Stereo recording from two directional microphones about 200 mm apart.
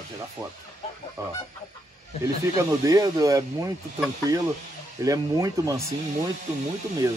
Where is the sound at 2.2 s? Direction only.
20° right (ahead or behind).